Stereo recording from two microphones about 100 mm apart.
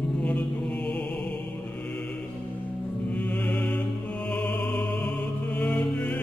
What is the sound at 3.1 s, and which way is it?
Music, 15° left (ahead or behind).